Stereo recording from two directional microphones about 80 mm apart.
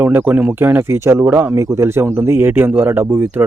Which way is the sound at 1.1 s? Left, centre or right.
Right.